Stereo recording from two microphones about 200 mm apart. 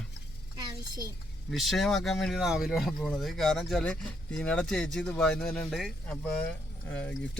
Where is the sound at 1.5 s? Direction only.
Centre (ahead or behind).